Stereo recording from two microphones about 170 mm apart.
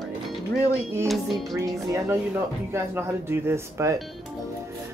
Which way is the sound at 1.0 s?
Centre (ahead or behind).